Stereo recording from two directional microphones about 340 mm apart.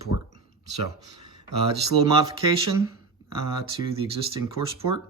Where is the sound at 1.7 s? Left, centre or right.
Centre.